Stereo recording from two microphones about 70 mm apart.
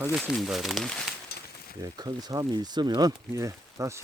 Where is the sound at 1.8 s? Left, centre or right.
Right.